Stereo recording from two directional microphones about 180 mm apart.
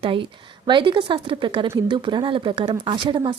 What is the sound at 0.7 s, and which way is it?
Speech, 25° right (ahead or behind).